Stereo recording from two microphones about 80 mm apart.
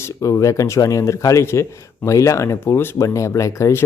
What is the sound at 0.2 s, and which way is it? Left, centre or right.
Speech, left.